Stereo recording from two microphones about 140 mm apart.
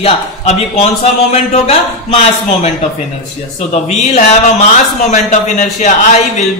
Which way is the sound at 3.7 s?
60° left (ahead or behind).